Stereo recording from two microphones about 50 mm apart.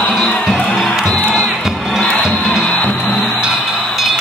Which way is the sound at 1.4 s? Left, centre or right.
Centre.